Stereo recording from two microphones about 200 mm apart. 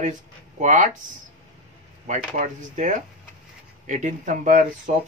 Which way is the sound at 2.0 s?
35° right (ahead or behind).